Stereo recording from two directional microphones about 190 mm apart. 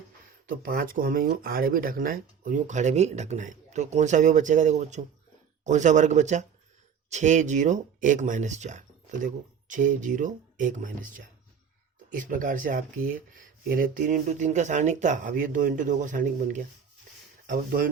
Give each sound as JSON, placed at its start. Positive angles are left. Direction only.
{"t": 0.4, "sound": "speech", "side_deg": -45}
{"t": 12.1, "sound": "speech", "side_deg": -45}